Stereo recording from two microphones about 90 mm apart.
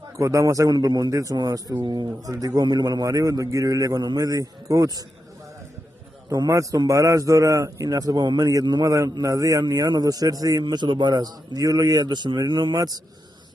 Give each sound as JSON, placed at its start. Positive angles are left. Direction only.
{"t": 0.2, "sound": "a man's voice", "side_deg": -35}
{"t": 1.8, "sound": "a man's voice", "side_deg": -55}
{"t": 6.2, "sound": "a man's voice", "side_deg": -40}
{"t": 10.6, "sound": "a man's voice", "side_deg": -60}
{"t": 12.7, "sound": "a man's voice", "side_deg": -45}